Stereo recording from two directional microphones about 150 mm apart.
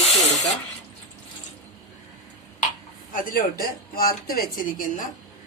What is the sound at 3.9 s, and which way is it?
Speech, 80° left.